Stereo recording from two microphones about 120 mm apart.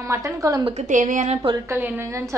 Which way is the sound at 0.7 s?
80° right.